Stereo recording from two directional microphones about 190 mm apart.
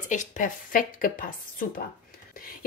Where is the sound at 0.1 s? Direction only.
45° left (ahead or behind).